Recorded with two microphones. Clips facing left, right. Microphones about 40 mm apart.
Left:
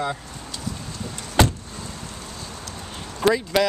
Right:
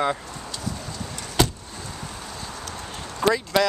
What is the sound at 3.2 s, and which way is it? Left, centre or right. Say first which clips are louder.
Speech: left 1 dB; centre.